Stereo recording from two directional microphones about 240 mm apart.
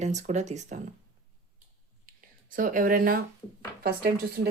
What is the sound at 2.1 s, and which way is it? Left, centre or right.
Whispering, right.